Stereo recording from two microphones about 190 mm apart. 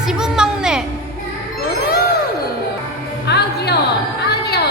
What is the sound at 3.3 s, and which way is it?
Music, 60° left (ahead or behind).